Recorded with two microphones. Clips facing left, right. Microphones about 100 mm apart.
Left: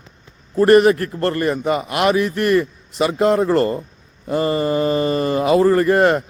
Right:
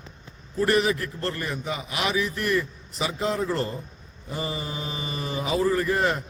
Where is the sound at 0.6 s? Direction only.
60° left (ahead or behind).